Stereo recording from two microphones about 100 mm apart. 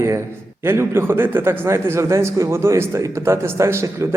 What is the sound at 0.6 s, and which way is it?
A man's voice, 25° right (ahead or behind).